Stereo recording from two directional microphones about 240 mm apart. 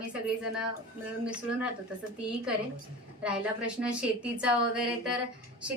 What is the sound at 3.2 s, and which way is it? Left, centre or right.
A woman's voice, centre.